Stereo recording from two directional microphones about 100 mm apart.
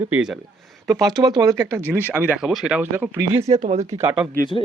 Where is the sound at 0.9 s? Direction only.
40° right (ahead or behind).